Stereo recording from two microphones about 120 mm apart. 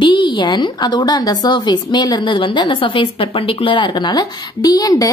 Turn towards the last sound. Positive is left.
turn(degrees=30)  # may be behind; listen again after turning